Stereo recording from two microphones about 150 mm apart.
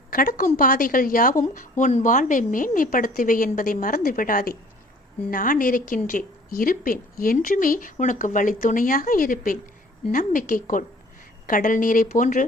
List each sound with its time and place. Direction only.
0.1 s a woman's voice: 70° left (ahead or behind)
1.8 s a woman's voice: 50° left (ahead or behind)